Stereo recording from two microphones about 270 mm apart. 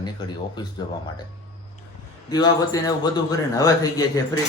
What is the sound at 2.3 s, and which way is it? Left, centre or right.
A man's voice, centre.